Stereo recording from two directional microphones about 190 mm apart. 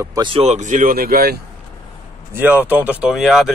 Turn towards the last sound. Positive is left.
turn(degrees=0)  # may be behind; listen again after turning